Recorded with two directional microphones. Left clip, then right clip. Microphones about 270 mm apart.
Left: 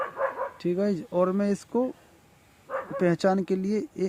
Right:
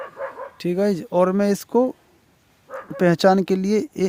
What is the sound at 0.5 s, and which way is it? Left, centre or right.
Speech, right.